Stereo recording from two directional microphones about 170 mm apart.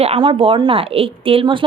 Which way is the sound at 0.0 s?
30° right (ahead or behind).